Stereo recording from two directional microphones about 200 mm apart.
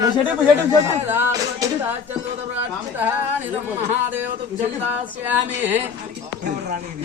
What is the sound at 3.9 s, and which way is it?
Speech, 10° right (ahead or behind).